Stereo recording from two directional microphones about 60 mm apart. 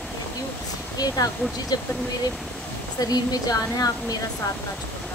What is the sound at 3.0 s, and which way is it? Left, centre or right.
Speech, left.